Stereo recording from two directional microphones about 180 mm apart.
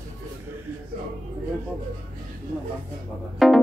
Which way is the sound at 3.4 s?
Centre (ahead or behind).